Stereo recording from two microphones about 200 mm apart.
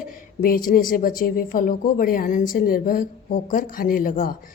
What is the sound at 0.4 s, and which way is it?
Speech, 45° left (ahead or behind).